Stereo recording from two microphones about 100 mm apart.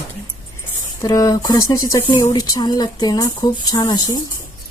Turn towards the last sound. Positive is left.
turn(degrees=45)  # may be behind; listen again after turning